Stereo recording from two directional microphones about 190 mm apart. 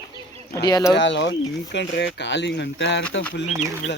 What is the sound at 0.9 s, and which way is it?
Speech, 70° left (ahead or behind).